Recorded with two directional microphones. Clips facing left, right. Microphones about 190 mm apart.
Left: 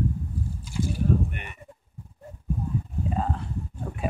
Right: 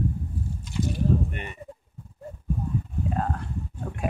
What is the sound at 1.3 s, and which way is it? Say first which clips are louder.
Speech: right 3 dB; 30° right (ahead or behind).